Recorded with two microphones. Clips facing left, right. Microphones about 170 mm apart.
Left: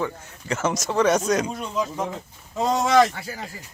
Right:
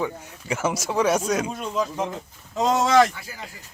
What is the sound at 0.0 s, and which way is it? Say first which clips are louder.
Speech: even; 10° right (ahead or behind).